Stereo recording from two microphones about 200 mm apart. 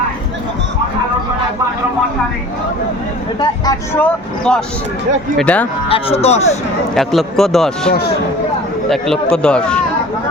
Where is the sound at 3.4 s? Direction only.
20° left (ahead or behind).